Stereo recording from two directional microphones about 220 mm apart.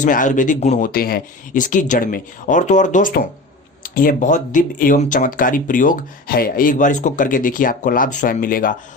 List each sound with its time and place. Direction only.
0.0 s speech: 35° left (ahead or behind)